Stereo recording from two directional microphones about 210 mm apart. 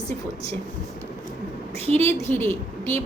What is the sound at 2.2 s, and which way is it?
Speech, 10° left (ahead or behind).